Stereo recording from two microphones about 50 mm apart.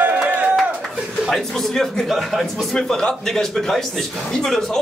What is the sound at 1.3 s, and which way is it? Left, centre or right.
A man's voice, centre.